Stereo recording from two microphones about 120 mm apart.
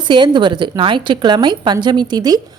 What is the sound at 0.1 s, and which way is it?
A woman's voice, 40° right (ahead or behind).